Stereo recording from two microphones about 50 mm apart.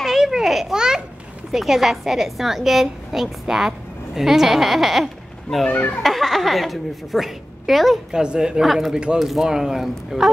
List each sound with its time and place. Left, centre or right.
0.0 s babbling: centre
0.7 s a woman's voice: centre
8.1 s speech: centre
8.6 s a woman's voice: centre
8.9 s speech: centre
9.2 s speech: centre